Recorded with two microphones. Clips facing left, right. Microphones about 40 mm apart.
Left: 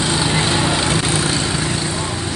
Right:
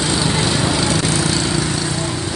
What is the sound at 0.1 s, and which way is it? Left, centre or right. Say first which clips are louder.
Vehicle: left 1 dB; left.